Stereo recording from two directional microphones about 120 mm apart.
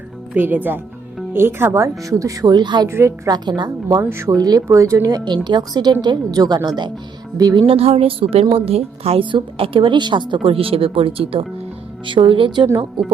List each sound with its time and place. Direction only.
0.3 s speech: 15° right (ahead or behind); by 2.8 s 40° right (ahead or behind)
2.8 s speech: 25° right (ahead or behind)
3.3 s a woman's voice: 35° right (ahead or behind)
7.7 s a woman's voice: 55° right (ahead or behind); by 12.6 s 40° right (ahead or behind)
12.6 s speech: 30° right (ahead or behind)